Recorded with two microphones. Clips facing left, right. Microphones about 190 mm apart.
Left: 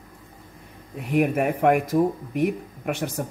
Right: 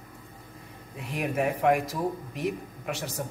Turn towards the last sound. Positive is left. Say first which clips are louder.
# left 6 dB
turn(degrees=55)  # may be behind; listen again after turning